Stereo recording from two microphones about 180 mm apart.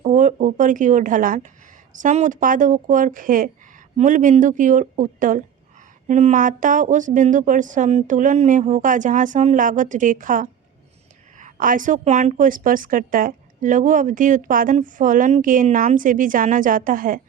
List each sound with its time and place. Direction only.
0.0 s a woman's voice: 45° right (ahead or behind)